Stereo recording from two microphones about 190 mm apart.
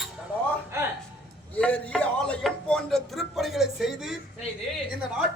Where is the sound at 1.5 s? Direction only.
5° left (ahead or behind).